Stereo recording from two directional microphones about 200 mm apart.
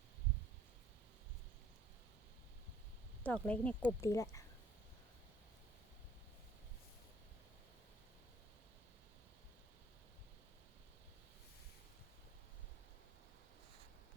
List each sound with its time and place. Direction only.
3.2 s speech: 5° left (ahead or behind)